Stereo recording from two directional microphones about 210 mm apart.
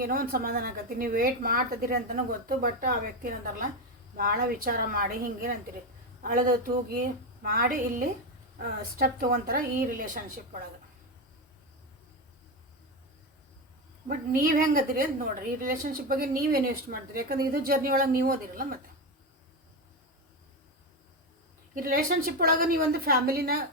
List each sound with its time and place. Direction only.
0.0 s a woman's voice: 45° right (ahead or behind)
14.1 s a woman's voice: 40° right (ahead or behind)
21.8 s a woman's voice: 45° right (ahead or behind)